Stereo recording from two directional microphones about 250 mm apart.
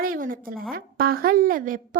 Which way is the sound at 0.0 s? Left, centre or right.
Right.